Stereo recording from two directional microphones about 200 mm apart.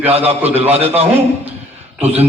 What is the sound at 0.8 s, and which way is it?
A man's voice, 10° right (ahead or behind).